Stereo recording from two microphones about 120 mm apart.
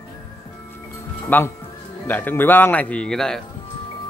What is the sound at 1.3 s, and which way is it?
A man's voice, 15° left (ahead or behind).